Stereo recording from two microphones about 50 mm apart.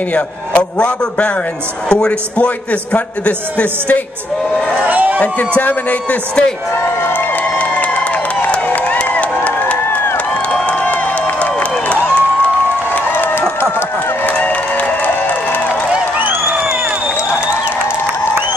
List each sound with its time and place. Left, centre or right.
0.1 s a man's voice: left
4.8 s speech: right
5.6 s a man's voice: left
7.2 s crowd: left
8.5 s a sound: left
9.1 s crowd: left
10.8 s crowd: left
13.3 s a sound: left
14.4 s applause: left
16.2 s crowd: right